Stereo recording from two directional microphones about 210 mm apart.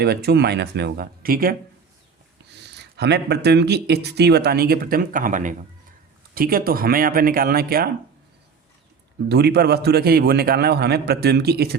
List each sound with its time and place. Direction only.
0.0 s speech: 50° right (ahead or behind)
9.3 s speech: 50° right (ahead or behind)